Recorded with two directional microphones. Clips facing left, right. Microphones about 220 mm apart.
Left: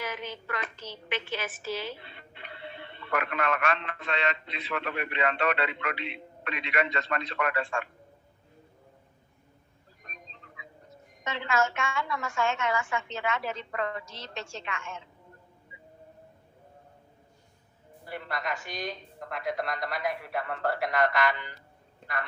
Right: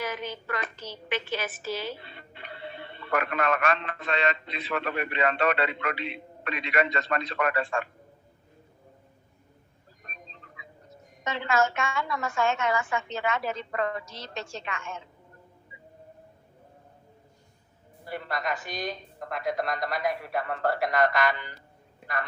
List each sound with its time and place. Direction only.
0.0 s a woman's voice: 40° right (ahead or behind)
11.2 s a woman's voice: 40° right (ahead or behind)
18.1 s a woman's voice: 40° right (ahead or behind)
22.0 s a sound: 10° right (ahead or behind)